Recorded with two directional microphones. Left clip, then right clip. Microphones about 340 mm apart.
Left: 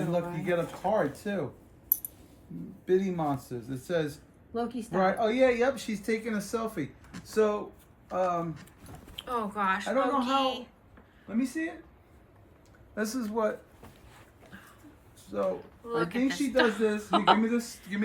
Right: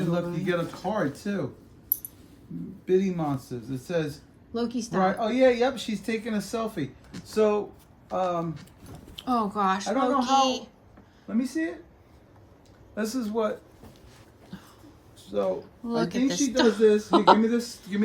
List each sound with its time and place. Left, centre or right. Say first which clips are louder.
0.1 s speech: right 1 dB; centre
2.8 s a man's voice: right 2 dB; centre
11.3 s speech: right 3 dB; right
12.9 s speech: right 3 dB; centre
15.3 s speech: right 4 dB; centre
17.7 s a man's voice: right 4 dB; centre